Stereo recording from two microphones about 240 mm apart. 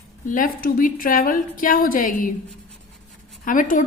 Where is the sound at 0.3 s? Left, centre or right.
Left.